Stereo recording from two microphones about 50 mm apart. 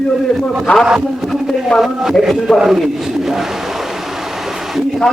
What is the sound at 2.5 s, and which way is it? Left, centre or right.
Speech, centre.